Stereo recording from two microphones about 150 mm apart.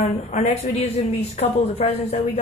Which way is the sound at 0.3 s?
45° left (ahead or behind).